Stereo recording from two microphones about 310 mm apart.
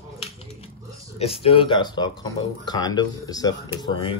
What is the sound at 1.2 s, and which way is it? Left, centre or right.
Speech, centre.